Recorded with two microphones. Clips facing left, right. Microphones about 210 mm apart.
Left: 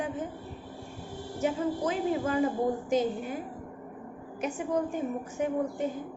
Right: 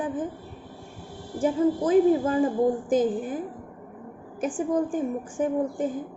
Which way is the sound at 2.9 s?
50° right (ahead or behind).